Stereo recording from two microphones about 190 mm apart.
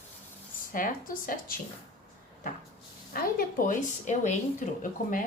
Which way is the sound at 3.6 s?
40° left (ahead or behind).